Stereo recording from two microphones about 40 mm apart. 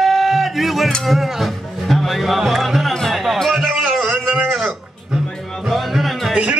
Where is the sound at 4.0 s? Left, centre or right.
Centre.